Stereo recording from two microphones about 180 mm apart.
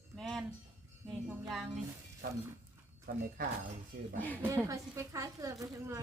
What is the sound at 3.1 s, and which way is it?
Speech, 50° right (ahead or behind).